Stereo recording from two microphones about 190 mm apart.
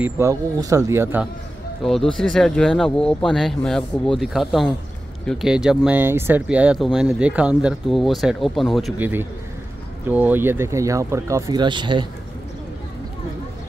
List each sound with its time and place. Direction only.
0.0 s speech: 15° right (ahead or behind)
1.8 s speech: centre (ahead or behind); by 12.1 s 25° right (ahead or behind)